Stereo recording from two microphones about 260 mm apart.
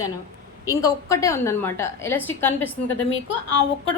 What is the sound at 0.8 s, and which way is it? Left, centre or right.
A woman's voice, centre.